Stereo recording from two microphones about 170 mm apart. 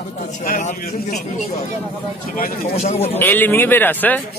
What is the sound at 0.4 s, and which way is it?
Speech, 50° left (ahead or behind).